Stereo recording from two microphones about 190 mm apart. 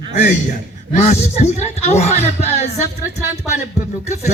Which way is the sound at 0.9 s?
35° left (ahead or behind).